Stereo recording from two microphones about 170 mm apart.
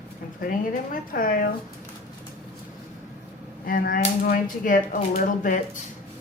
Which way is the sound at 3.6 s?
55° left (ahead or behind).